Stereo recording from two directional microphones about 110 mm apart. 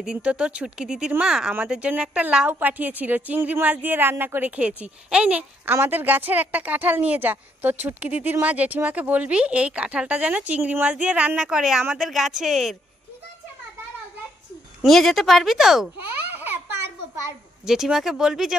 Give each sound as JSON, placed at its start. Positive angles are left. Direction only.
{"t": 0.0, "sound": "a woman's voice", "side_deg": -10}
{"t": 14.8, "sound": "speech", "side_deg": 0}
{"t": 16.1, "sound": "a sound", "side_deg": -20}
{"t": 17.6, "sound": "speech", "side_deg": -5}